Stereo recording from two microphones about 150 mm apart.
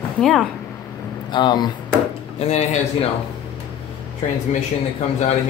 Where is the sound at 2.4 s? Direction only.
45° left (ahead or behind).